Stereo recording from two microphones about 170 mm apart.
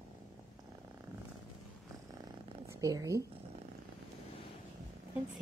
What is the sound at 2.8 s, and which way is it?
Speech, 20° right (ahead or behind).